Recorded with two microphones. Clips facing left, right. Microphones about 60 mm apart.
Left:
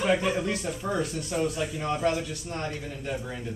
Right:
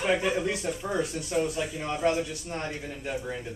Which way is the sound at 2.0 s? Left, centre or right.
Centre.